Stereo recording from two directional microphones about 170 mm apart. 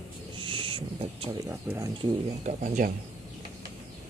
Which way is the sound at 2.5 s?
45° right (ahead or behind).